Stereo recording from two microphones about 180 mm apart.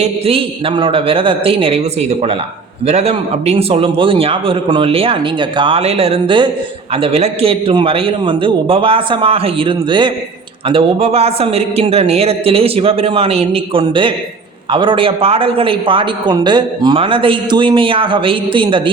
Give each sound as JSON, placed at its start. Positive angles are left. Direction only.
{"t": 0.0, "sound": "a man's voice", "side_deg": -30}